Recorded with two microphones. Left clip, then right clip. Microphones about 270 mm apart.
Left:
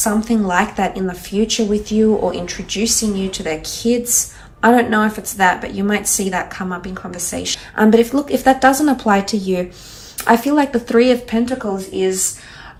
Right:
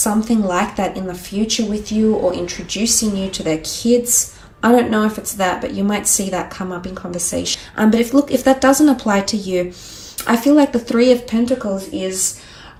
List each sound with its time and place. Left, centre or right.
0.2 s a woman's voice: centre